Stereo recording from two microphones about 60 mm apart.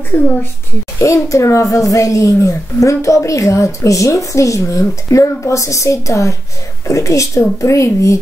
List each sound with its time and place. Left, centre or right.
0.9 s speech: left